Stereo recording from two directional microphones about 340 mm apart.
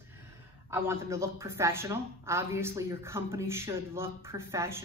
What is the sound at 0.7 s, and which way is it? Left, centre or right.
A man's voice, centre.